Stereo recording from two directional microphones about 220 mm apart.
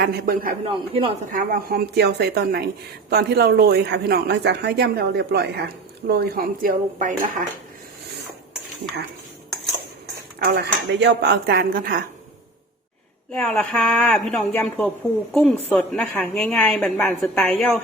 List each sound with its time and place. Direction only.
0.0 s speech: 45° right (ahead or behind)
0.6 s speech: 25° right (ahead or behind)
1.3 s speech: 40° right (ahead or behind)
10.4 s speech: 45° right (ahead or behind)
13.3 s a woman's voice: 5° left (ahead or behind)